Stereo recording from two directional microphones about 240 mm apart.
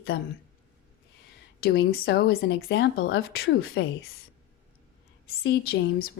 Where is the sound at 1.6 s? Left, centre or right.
Left.